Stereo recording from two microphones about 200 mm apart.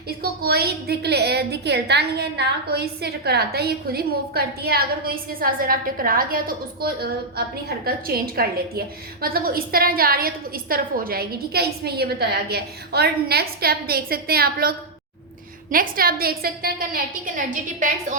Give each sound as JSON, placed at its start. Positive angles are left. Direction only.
{"t": 0.2, "sound": "a woman's voice", "side_deg": -50}